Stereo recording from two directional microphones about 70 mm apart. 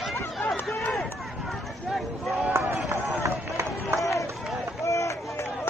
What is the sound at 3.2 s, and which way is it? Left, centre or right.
Run, right.